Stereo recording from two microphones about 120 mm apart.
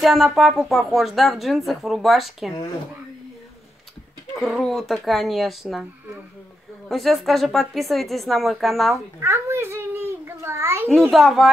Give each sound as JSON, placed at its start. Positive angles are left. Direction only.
{"t": 0.0, "sound": "speech", "side_deg": 0}
{"t": 4.4, "sound": "speech", "side_deg": 0}
{"t": 6.9, "sound": "speech", "side_deg": 0}
{"t": 9.2, "sound": "a child's voice", "side_deg": -25}
{"t": 10.9, "sound": "speech", "side_deg": 0}